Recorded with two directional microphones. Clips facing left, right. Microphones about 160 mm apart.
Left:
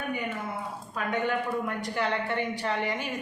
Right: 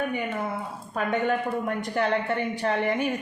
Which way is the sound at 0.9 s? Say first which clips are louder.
Right 4 dB; 45° right (ahead or behind).